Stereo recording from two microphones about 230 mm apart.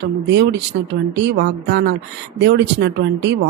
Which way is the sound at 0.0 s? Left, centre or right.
Right.